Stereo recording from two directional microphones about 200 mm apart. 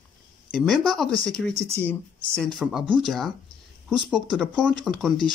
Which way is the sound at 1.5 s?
15° right (ahead or behind).